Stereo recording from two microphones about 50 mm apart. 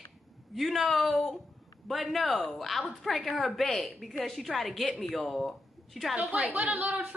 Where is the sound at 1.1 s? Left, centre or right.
Centre.